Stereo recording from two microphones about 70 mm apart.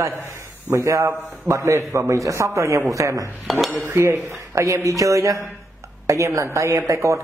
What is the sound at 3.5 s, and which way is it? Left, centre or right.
Dishes, centre.